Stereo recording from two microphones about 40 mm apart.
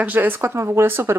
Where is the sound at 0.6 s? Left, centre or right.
Right.